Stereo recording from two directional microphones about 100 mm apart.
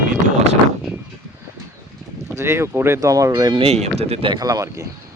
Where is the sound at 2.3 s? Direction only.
25° right (ahead or behind).